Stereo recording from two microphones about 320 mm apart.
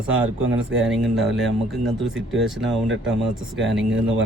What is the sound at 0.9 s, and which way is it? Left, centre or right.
Speech, centre.